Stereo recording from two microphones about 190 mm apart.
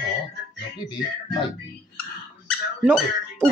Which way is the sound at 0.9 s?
20° left (ahead or behind).